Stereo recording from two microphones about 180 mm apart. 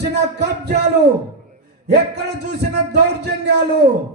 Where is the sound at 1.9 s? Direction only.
70° right (ahead or behind).